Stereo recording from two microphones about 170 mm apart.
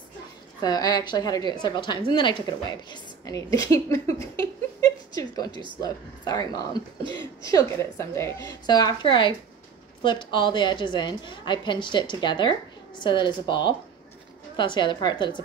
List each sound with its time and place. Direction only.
0.6 s a woman's voice: 25° left (ahead or behind)